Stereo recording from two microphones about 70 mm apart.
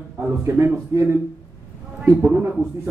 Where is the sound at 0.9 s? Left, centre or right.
Right.